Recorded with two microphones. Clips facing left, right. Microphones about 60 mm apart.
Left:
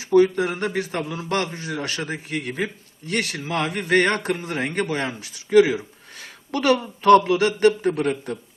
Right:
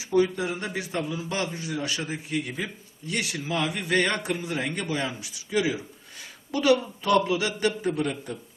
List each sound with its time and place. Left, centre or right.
0.0 s a man's voice: left